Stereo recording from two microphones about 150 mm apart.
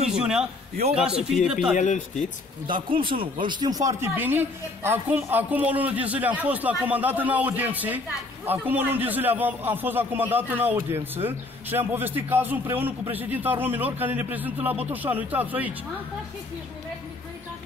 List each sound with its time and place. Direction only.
0.2 s speech: 5° right (ahead or behind)
1.8 s speech: 55° left (ahead or behind)
2.6 s a woman's voice: 35° right (ahead or behind); by 15.7 s 10° right (ahead or behind)